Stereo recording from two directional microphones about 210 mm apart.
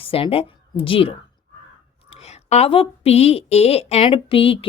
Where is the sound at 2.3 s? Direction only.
30° left (ahead or behind).